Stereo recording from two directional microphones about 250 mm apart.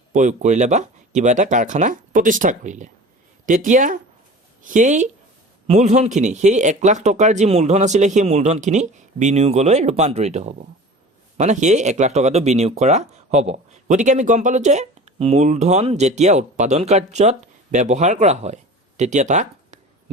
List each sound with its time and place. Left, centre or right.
0.1 s speech: right